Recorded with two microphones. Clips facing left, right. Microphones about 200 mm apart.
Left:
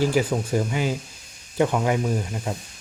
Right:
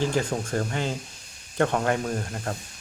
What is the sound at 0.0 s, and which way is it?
Speech, 10° left (ahead or behind).